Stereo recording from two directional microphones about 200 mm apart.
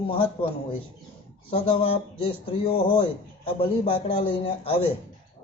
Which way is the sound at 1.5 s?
25° left (ahead or behind).